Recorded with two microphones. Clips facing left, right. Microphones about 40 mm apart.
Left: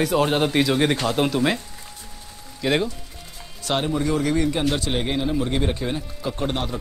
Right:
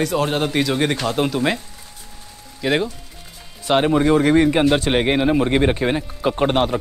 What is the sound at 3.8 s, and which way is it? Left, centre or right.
Speech, right.